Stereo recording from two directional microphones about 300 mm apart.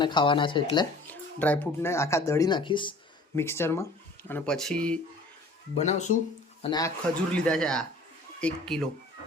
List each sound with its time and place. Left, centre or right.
0.0 s speech: centre
1.0 s speech: centre
5.7 s a man's voice: left
7.3 s a man's voice: centre